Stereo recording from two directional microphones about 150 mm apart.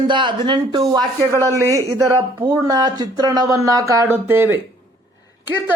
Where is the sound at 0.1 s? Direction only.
30° right (ahead or behind).